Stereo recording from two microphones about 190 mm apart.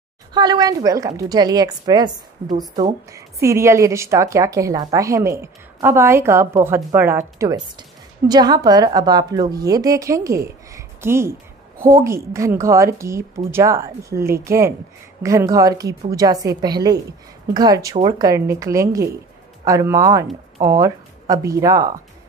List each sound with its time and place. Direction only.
0.3 s a woman's voice: 20° right (ahead or behind)